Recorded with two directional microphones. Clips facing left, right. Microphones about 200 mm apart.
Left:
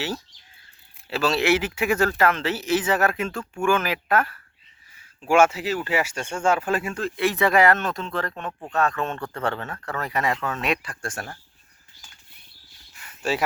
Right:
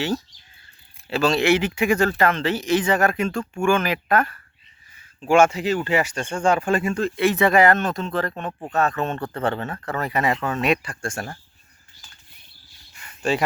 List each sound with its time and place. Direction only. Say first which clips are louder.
1.1 s speech: right 3 dB; 5° left (ahead or behind)
9.1 s speech: right 4 dB; 30° right (ahead or behind)
9.4 s speech: right 3 dB; 5° right (ahead or behind)
12.9 s a sound: right 3 dB; centre (ahead or behind)